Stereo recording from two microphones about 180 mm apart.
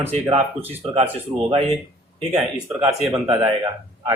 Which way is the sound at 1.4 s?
35° right (ahead or behind).